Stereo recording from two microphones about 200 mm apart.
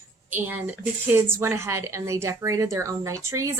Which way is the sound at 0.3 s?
10° right (ahead or behind).